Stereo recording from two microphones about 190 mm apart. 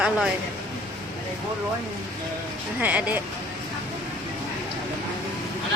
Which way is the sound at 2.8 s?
10° right (ahead or behind).